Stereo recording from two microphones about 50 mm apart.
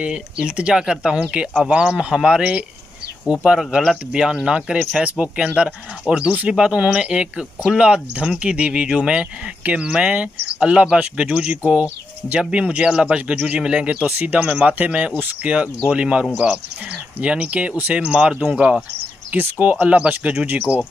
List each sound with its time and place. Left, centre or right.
0.0 s speech: centre
4.1 s speech: centre
14.0 s speech: right
14.4 s speech: right
19.3 s speech: right